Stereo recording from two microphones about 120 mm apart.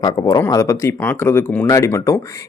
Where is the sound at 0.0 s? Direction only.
35° left (ahead or behind).